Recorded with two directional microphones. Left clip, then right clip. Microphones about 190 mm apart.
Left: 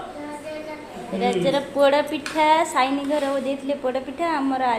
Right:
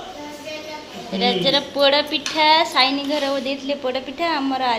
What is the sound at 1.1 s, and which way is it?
A woman's voice, 10° left (ahead or behind).